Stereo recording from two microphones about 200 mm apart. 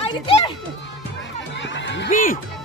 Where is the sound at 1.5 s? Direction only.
65° left (ahead or behind).